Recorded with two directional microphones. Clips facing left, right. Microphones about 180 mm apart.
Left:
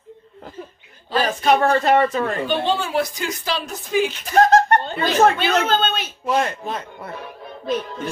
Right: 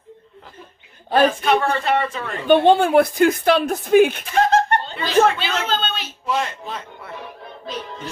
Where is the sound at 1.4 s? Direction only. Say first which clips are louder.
Left 3 dB; 40° left (ahead or behind).